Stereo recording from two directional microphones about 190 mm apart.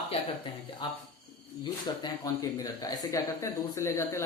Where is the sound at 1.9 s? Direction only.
20° left (ahead or behind).